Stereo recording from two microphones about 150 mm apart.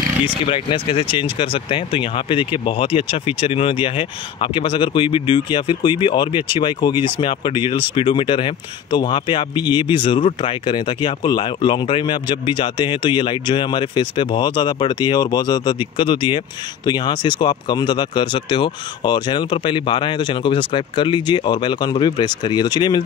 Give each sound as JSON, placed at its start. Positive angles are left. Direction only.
{"t": 0.5, "sound": "speech", "side_deg": 35}